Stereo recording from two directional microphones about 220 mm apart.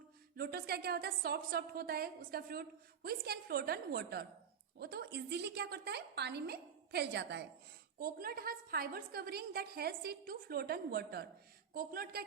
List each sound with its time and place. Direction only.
0.3 s a woman's voice: 45° right (ahead or behind)